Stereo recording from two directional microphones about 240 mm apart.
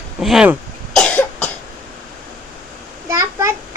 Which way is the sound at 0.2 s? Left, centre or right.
Centre.